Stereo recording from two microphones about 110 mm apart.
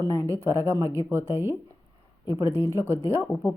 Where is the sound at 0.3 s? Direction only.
25° right (ahead or behind).